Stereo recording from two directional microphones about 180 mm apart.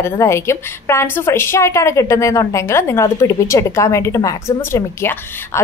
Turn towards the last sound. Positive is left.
turn(degrees=15)  # may be behind; listen again after turning